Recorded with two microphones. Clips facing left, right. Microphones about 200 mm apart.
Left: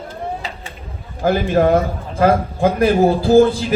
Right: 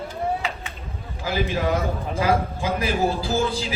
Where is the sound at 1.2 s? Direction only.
50° left (ahead or behind).